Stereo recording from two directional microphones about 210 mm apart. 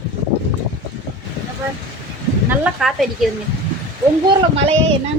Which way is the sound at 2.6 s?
Centre (ahead or behind).